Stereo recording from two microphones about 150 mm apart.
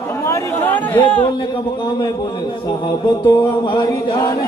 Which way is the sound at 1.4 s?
30° left (ahead or behind).